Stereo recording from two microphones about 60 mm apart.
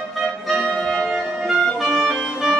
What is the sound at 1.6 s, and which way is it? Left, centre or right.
Music, centre.